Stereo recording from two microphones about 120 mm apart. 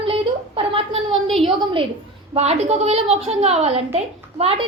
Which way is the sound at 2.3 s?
60° right (ahead or behind).